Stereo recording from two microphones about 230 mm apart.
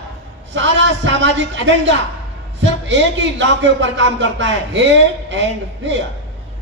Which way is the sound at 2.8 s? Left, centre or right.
Right.